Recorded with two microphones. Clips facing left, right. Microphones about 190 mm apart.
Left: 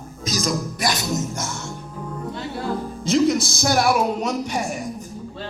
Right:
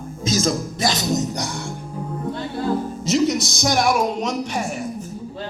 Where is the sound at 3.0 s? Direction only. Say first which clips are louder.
Left 1 dB; centre (ahead or behind).